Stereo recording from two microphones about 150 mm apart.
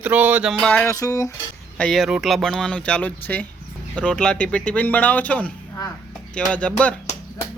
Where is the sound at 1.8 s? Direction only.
Centre (ahead or behind).